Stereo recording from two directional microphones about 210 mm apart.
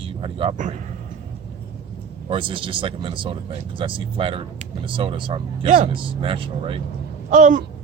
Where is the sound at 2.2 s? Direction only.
25° right (ahead or behind).